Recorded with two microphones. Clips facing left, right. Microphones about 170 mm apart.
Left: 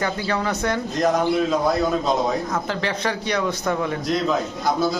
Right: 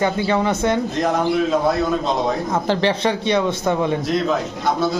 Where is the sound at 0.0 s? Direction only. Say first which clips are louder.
Right 5 dB; 20° right (ahead or behind).